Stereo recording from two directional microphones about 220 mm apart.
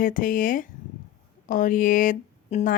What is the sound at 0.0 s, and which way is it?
Speech, 40° left (ahead or behind).